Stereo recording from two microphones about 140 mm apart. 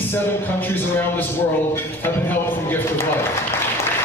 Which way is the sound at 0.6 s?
15° left (ahead or behind).